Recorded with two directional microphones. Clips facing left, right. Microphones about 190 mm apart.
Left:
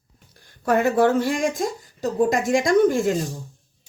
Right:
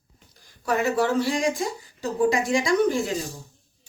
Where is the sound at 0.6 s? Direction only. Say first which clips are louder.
Left 5 dB; 55° left (ahead or behind).